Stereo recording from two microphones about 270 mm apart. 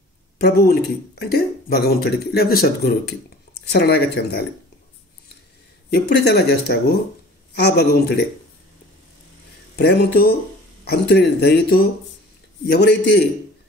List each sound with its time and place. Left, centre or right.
0.4 s speech: left
5.9 s speech: left
9.8 s speech: left